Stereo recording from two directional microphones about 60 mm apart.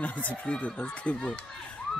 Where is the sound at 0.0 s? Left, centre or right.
Left.